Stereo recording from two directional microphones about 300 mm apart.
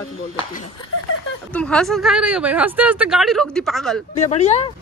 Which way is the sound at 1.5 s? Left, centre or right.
Centre.